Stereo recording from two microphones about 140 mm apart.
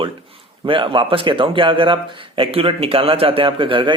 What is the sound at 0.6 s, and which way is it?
Speech, 40° right (ahead or behind).